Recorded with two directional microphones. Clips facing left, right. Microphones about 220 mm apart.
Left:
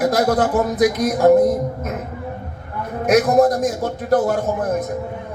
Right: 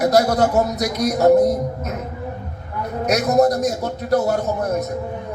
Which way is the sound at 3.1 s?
50° left (ahead or behind).